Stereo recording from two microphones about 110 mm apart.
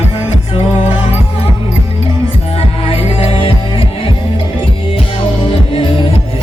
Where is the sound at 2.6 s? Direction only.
60° left (ahead or behind).